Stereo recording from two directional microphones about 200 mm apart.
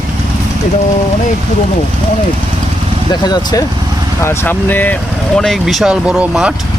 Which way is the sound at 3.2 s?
20° left (ahead or behind).